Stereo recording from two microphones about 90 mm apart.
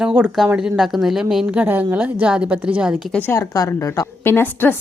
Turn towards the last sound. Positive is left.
turn(degrees=25)  # may be behind; listen again after turning